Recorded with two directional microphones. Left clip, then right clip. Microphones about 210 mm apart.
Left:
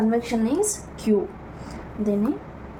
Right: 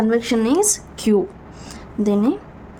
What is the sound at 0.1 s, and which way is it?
Speech, 50° right (ahead or behind).